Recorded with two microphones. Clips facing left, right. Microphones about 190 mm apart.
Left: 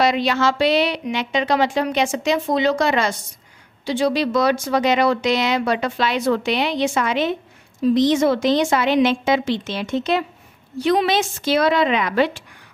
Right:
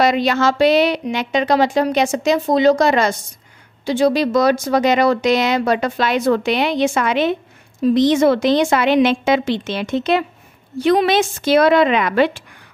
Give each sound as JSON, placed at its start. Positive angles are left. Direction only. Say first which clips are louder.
{"t": 0.0, "sound": "a woman's voice", "louder": "right 3 dB", "side_deg": -45}